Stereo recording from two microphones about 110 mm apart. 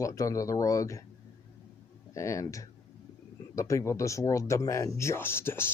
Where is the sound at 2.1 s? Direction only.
30° left (ahead or behind).